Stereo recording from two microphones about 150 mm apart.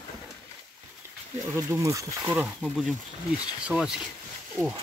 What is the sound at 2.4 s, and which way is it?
Speech, 5° right (ahead or behind).